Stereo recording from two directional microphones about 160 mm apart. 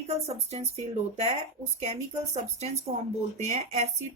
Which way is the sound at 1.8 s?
45° right (ahead or behind).